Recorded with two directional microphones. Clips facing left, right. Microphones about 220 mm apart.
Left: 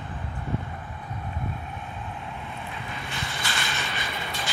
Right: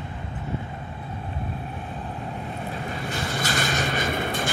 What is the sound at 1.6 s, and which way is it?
Vehicle, 40° right (ahead or behind).